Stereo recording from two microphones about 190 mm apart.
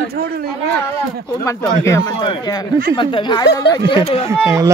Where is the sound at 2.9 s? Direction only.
25° left (ahead or behind).